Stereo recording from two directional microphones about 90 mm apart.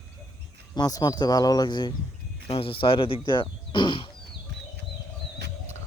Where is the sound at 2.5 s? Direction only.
85° left; by 4.1 s 60° left (ahead or behind).